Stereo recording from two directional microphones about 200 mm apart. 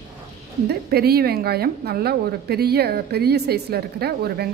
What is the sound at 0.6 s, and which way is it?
Speech, 50° right (ahead or behind).